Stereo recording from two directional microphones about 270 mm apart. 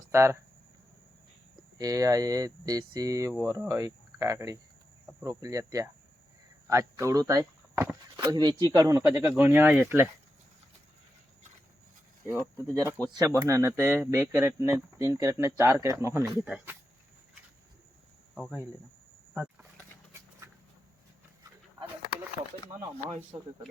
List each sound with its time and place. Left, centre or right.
0.1 s speech: centre
1.8 s speech: centre
12.6 s speech: centre
18.3 s speech: centre
19.3 s vehicle: centre
23.3 s speech: centre